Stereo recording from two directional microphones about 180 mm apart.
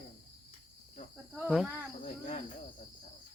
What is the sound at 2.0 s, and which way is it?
Cricket, 45° left (ahead or behind).